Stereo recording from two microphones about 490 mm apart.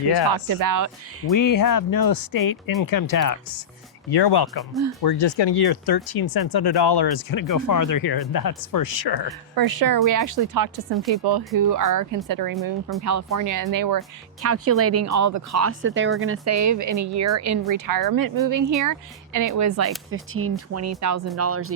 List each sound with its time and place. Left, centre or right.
0.3 s speech: right
1.3 s speech: left
4.1 s speech: left
9.6 s a woman's voice: right
11.1 s speech: right
14.4 s speech: right